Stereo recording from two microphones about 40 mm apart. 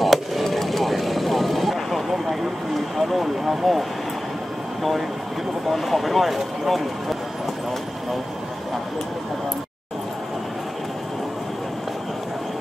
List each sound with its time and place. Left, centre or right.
0.0 s vehicle: centre
3.0 s speech: centre
5.7 s speech: centre